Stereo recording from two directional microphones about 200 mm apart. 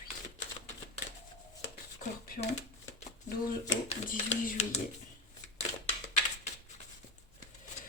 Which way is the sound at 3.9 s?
40° left (ahead or behind).